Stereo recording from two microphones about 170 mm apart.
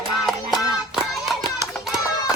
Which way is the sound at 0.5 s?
Centre (ahead or behind).